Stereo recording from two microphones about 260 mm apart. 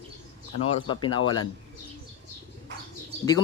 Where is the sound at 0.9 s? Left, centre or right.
Centre.